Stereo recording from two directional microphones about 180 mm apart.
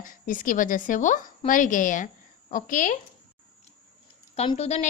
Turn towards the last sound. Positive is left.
turn(degrees=35)  # may be behind; listen again after turning